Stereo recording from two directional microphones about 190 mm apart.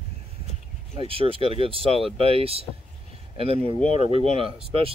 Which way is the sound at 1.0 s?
30° right (ahead or behind).